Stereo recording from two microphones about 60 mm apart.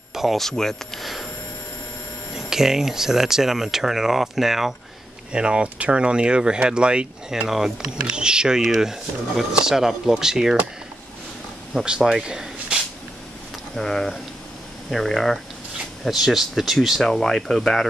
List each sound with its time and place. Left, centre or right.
0.1 s a sound: centre
0.4 s speech: centre
2.3 s speech: centre
5.3 s speech: centre
7.4 s speech: centre
8.0 s speech: centre
11.7 s speech: centre
12.0 s a sound: centre
13.7 s speech: centre
16.0 s speech: centre